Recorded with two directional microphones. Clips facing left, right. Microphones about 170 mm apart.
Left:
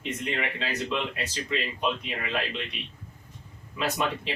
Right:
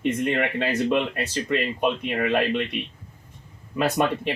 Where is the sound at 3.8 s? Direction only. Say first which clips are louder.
Right 6 dB; 55° right (ahead or behind).